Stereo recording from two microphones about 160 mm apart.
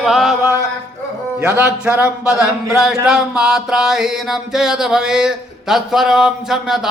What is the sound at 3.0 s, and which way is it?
Music, 5° right (ahead or behind).